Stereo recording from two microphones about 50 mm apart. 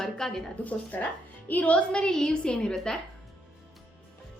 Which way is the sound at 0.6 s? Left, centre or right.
Left.